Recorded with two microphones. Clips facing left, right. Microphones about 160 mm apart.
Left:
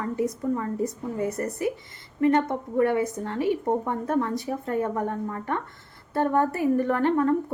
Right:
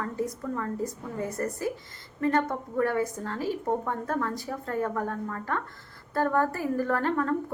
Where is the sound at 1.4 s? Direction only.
20° left (ahead or behind).